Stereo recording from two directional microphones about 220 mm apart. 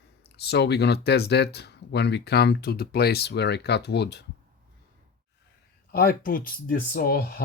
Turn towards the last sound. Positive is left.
turn(degrees=45)  # may be behind; listen again after turning